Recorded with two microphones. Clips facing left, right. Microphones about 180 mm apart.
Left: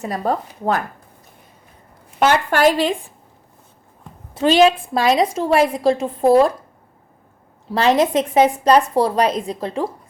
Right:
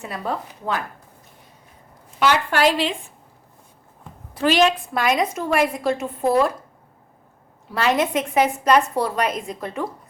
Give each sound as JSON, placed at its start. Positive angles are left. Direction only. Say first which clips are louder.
{"t": 0.0, "sound": "a woman's voice", "louder": "left 6 dB", "side_deg": 40}
{"t": 2.1, "sound": "speech", "louder": "left 3 dB", "side_deg": 50}
{"t": 4.4, "sound": "a woman's voice", "louder": "left 4 dB", "side_deg": 30}
{"t": 7.7, "sound": "a woman's voice", "louder": "left 5 dB", "side_deg": 35}